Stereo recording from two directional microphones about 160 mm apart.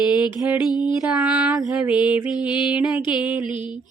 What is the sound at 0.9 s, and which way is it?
Music, 5° right (ahead or behind).